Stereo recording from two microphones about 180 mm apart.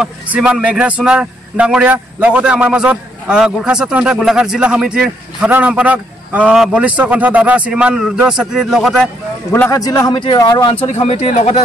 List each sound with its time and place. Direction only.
0.0 s a man's voice: 5° right (ahead or behind)
9.5 s speech: 15° left (ahead or behind)
10.9 s speech: 40° left (ahead or behind)